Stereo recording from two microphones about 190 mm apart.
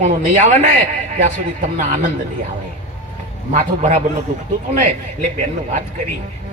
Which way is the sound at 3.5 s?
40° right (ahead or behind).